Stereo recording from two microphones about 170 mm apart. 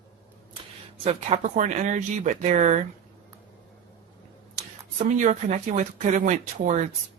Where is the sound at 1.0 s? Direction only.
40° right (ahead or behind).